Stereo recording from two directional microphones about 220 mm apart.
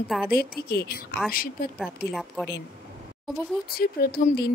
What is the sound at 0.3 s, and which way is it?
Speech, 45° left (ahead or behind).